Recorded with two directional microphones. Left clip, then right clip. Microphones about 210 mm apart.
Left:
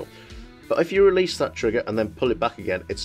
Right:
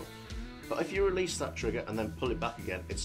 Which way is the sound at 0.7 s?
45° left (ahead or behind).